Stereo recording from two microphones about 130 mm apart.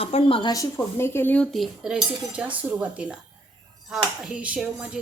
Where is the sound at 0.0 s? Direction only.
45° left (ahead or behind).